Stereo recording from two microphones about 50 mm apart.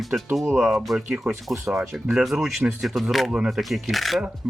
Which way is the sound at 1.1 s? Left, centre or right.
Centre.